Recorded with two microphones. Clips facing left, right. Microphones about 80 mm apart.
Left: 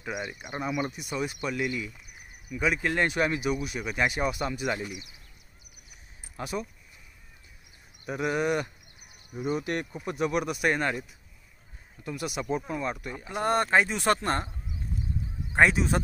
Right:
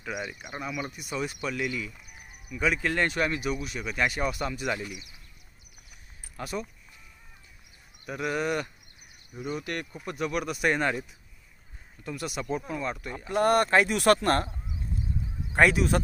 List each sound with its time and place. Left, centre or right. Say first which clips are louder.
0.0 s speech: even; centre
4.7 s speech: left 1 dB; left
6.3 s speech: left 1 dB; centre
8.0 s speech: left 2 dB; centre
13.4 s speech: right 2 dB; centre